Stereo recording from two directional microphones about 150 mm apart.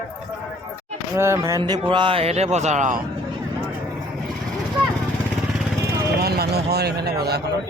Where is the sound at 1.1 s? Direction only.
15° right (ahead or behind).